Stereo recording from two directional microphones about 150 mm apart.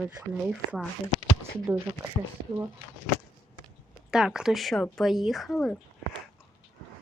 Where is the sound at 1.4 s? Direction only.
15° right (ahead or behind).